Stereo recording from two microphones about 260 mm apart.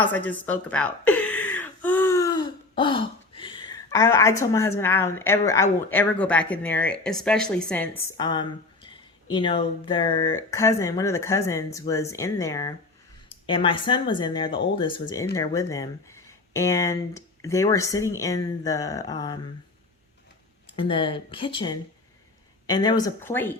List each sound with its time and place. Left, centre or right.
0.0 s a woman's voice: centre
8.1 s speech: centre
20.7 s speech: centre